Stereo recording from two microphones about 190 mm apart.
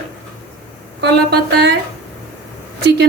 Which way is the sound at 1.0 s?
60° right (ahead or behind).